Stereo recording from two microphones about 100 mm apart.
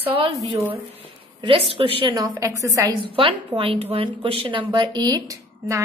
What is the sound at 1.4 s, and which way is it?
Speech, 60° right (ahead or behind).